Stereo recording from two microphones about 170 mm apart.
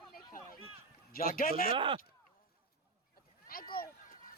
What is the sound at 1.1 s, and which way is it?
Speech, 60° left (ahead or behind).